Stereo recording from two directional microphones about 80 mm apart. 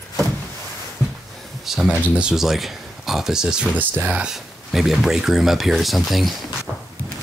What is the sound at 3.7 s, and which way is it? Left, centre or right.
Speech, centre.